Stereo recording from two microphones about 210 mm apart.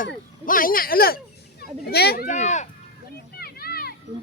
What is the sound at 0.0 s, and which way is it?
Speech, 40° left (ahead or behind).